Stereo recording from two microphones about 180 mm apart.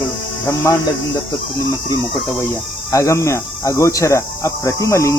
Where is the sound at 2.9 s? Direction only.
15° left (ahead or behind).